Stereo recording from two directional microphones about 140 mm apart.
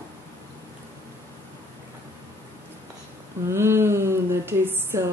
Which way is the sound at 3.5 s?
15° right (ahead or behind).